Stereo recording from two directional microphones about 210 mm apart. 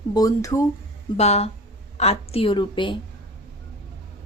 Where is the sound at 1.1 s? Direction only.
30° left (ahead or behind).